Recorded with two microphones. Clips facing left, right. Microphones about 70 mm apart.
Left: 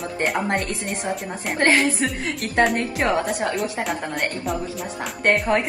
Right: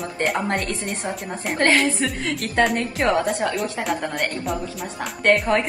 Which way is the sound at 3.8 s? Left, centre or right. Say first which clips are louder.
Right 1 dB; centre.